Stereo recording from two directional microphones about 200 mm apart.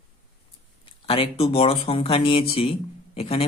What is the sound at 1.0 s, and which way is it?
Speech, 30° left (ahead or behind).